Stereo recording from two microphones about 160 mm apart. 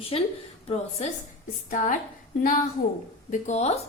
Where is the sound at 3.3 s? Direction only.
45° left (ahead or behind).